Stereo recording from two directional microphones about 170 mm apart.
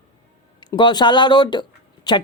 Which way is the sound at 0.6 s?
25° left (ahead or behind).